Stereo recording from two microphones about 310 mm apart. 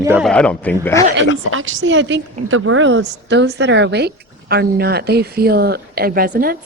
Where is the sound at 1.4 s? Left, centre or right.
Right.